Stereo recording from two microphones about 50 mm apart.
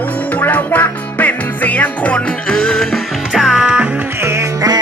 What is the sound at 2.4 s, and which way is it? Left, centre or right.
Music, centre.